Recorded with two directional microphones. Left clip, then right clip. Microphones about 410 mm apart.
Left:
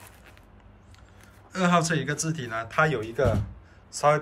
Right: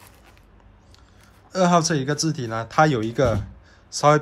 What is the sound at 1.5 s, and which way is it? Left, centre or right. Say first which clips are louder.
A man's voice: right 5 dB; centre.